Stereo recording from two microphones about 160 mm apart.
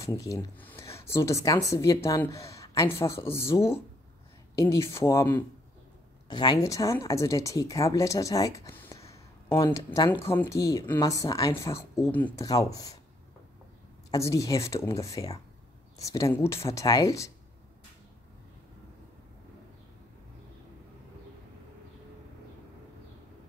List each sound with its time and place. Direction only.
0.0 s speech: 20° left (ahead or behind)
12.4 s speech: 20° left (ahead or behind)
14.1 s speech: 20° left (ahead or behind)